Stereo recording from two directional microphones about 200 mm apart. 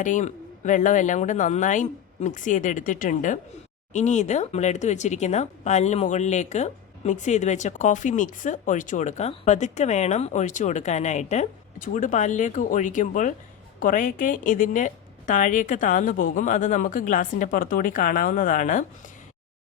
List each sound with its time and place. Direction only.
0.0 s speech: 40° left (ahead or behind)